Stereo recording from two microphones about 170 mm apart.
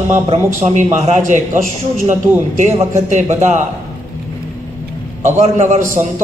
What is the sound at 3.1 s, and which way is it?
Speech, 45° right (ahead or behind).